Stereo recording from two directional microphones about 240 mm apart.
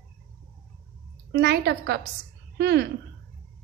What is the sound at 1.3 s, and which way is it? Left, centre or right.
A woman's voice, right.